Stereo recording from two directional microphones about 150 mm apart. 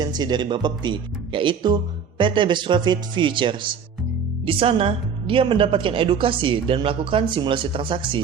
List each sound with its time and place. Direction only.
0.0 s a woman's voice: 30° right (ahead or behind)